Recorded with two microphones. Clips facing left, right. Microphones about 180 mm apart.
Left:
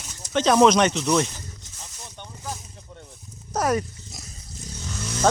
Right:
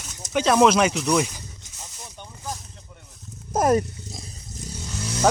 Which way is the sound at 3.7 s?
30° right (ahead or behind).